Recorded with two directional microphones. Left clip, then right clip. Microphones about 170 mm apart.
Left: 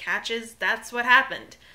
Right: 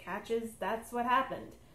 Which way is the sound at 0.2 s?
20° left (ahead or behind).